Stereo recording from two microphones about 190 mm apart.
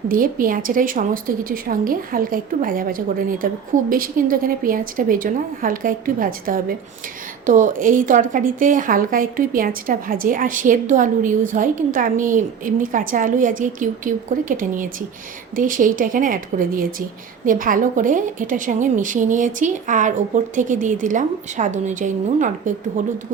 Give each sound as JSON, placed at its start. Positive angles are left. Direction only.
{"t": 0.1, "sound": "a woman's voice", "side_deg": -45}